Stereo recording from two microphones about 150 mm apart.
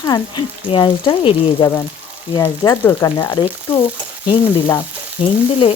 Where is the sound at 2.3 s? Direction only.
20° left (ahead or behind).